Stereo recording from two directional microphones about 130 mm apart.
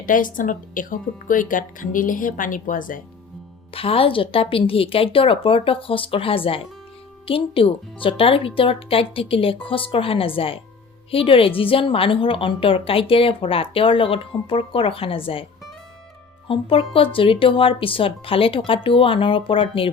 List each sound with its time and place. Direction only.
0.0 s speech: 90° left
3.7 s a woman's voice: 45° left (ahead or behind)
16.5 s a woman's voice: 45° left (ahead or behind)